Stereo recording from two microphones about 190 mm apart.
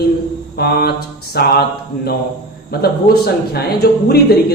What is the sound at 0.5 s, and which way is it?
Speech, 55° left (ahead or behind).